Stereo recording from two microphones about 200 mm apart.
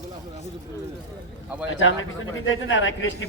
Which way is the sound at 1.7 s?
75° left (ahead or behind).